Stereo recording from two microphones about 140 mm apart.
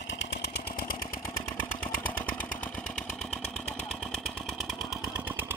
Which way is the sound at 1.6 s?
10° left (ahead or behind).